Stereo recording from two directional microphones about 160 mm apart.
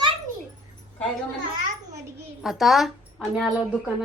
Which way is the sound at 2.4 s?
Centre (ahead or behind).